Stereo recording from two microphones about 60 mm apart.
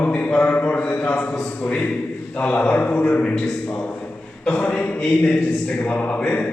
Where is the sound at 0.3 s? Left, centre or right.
Left.